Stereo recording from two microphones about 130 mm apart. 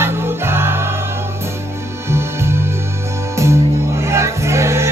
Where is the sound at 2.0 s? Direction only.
20° right (ahead or behind).